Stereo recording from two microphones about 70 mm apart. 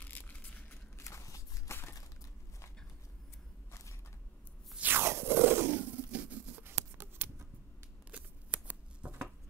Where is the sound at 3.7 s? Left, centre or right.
Left.